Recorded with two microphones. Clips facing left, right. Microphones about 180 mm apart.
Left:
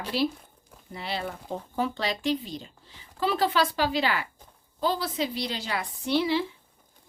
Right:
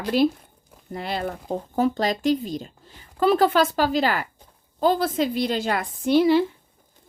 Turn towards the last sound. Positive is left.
turn(degrees=-45)  # may be behind; listen again after turning